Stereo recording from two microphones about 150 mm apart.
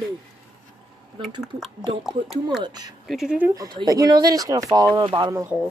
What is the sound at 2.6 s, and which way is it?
Speech, 25° right (ahead or behind).